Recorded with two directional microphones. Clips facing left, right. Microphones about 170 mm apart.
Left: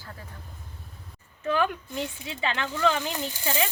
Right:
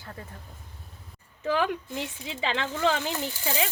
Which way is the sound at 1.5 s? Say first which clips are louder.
Left 1 dB; 20° right (ahead or behind).